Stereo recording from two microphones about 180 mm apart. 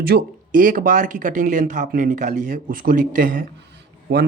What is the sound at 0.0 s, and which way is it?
Speech, 60° right (ahead or behind).